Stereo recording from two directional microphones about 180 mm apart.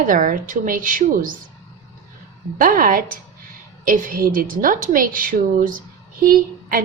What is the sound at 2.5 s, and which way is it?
A woman's voice, 50° right (ahead or behind).